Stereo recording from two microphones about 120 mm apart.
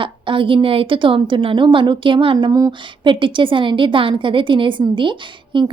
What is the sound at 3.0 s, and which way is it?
A woman's voice, 45° right (ahead or behind).